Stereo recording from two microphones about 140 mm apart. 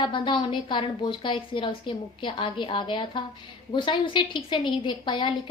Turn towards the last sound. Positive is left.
turn(degrees=35)  # may be behind; listen again after turning